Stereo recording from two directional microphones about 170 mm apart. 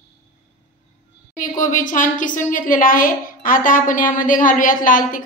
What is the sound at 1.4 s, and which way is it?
A woman's voice, 50° left (ahead or behind).